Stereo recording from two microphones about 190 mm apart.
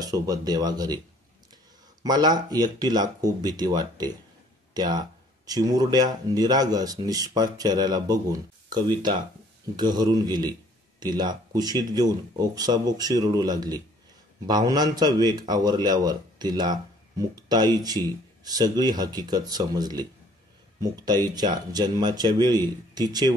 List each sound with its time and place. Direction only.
0.0 s speech: 20° right (ahead or behind)
2.0 s speech: 20° right (ahead or behind)